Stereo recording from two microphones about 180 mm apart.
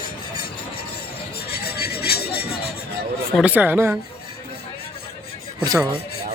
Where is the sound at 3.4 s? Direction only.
10° right (ahead or behind).